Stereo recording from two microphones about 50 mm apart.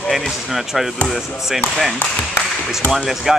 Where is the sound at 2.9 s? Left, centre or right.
Centre.